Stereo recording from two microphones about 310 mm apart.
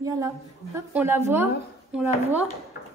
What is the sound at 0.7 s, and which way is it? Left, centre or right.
Speech, centre.